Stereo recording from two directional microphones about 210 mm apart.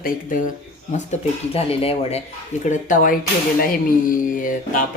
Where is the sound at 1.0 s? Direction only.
30° left (ahead or behind).